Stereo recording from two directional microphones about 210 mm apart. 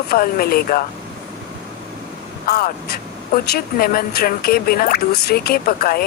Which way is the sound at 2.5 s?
45° left (ahead or behind).